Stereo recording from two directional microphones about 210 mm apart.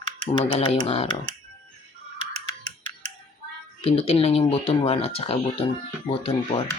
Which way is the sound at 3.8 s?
30° left (ahead or behind).